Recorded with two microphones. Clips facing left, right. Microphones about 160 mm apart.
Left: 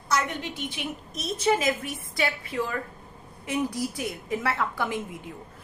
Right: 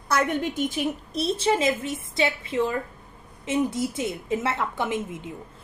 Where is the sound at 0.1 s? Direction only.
50° right (ahead or behind).